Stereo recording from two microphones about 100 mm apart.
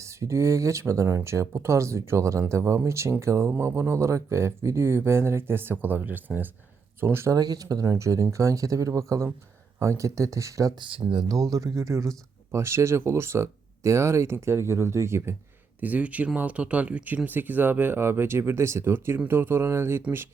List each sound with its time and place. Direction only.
0.0 s speech: 30° right (ahead or behind)
7.3 s speech: 40° right (ahead or behind)
10.8 s speech: 60° right (ahead or behind)
11.1 s speech: 50° right (ahead or behind)
11.5 s speech: 35° right (ahead or behind)
15.8 s speech: 15° right (ahead or behind)